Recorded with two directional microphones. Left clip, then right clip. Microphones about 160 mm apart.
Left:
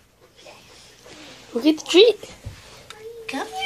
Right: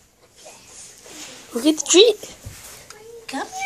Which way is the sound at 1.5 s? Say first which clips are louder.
Right 1 dB; 5° right (ahead or behind).